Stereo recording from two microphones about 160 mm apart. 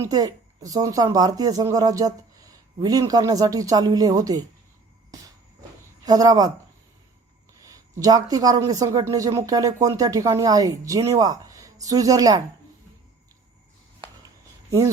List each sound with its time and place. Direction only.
0.0 s speech: 20° right (ahead or behind)
6.1 s speech: 25° right (ahead or behind)
7.6 s speech: 20° right (ahead or behind)